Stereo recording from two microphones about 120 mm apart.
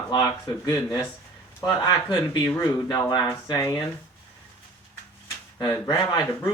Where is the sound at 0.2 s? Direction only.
30° left (ahead or behind).